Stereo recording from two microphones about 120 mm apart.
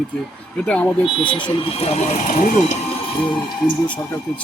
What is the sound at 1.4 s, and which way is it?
Speech, 50° left (ahead or behind).